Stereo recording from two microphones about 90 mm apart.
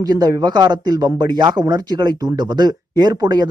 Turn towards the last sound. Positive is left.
turn(degrees=-50)  # may be behind; listen again after turning